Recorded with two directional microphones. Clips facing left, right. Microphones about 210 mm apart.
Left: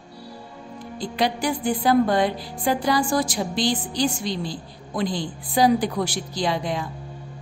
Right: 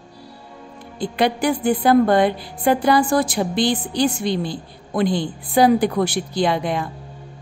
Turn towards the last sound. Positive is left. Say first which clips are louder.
# right 5 dB
turn(degrees=-60)  # may be behind; listen again after turning